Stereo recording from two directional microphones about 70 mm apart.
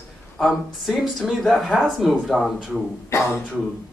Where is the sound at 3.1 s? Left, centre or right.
Left.